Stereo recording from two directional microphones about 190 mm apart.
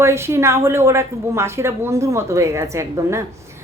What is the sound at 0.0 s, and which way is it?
Speech, 15° right (ahead or behind).